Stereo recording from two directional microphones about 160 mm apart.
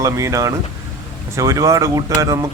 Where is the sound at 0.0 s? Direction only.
20° right (ahead or behind).